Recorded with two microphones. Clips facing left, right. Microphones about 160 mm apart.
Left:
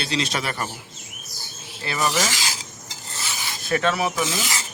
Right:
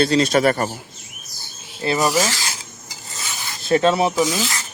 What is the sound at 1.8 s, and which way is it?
Filing, 30° right (ahead or behind).